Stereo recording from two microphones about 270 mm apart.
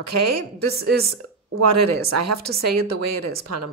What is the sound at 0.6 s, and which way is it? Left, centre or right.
Speech, right.